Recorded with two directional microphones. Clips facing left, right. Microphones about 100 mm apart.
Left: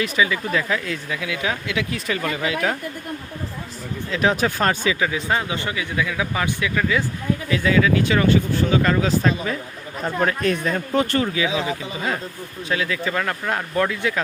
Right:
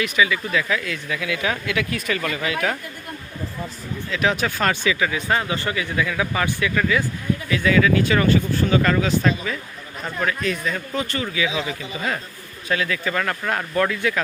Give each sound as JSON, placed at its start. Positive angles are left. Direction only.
{"t": 0.0, "sound": "speech", "side_deg": 35}
{"t": 4.1, "sound": "speech", "side_deg": 30}
{"t": 9.0, "sound": "speech", "side_deg": 30}
{"t": 10.2, "sound": "speech", "side_deg": 45}
{"t": 10.9, "sound": "speech", "side_deg": 55}
{"t": 11.3, "sound": "speech", "side_deg": 25}